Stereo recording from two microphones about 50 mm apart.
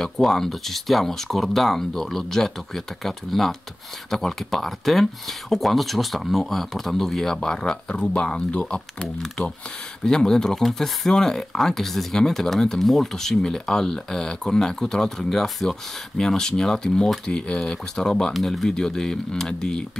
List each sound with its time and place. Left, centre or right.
0.0 s speech: centre